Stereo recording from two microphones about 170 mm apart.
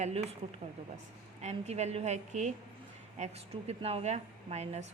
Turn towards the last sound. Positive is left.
turn(degrees=-40)  # may be behind; listen again after turning